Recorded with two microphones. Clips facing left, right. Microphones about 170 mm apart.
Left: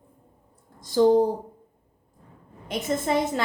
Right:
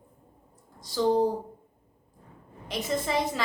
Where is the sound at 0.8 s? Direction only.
50° left (ahead or behind).